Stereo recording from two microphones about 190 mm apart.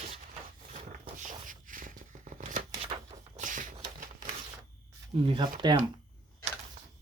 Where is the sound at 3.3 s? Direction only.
45° right (ahead or behind).